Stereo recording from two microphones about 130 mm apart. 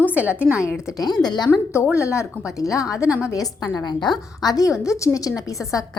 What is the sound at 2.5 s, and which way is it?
A woman's voice, 25° left (ahead or behind).